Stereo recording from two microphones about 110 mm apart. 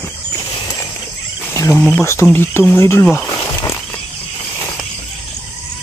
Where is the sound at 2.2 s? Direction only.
20° left (ahead or behind).